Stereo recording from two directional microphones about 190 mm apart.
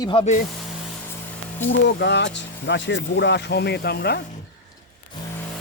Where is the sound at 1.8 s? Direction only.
65° left (ahead or behind).